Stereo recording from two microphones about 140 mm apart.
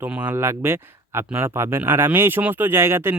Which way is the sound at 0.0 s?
15° right (ahead or behind).